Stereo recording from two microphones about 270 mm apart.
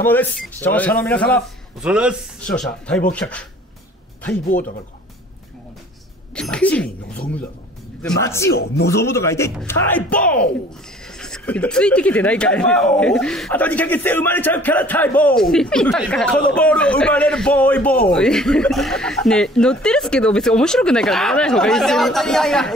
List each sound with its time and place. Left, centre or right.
0.0 s speech: centre
4.5 s speech: left
6.3 s speech: centre
8.0 s speech: centre